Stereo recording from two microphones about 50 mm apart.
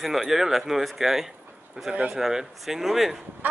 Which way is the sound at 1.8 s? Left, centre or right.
Right.